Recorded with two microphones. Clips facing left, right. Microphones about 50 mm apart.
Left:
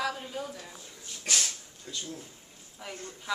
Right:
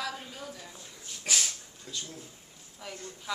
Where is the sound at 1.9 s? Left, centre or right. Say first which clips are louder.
Left 1 dB; centre.